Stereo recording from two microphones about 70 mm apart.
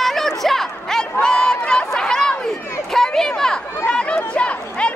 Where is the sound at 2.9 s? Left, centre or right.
Centre.